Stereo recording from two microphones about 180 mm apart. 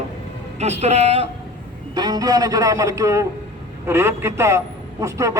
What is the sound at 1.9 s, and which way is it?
A man's voice, 20° right (ahead or behind).